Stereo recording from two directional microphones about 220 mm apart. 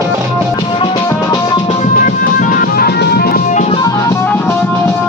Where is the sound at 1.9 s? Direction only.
40° left (ahead or behind).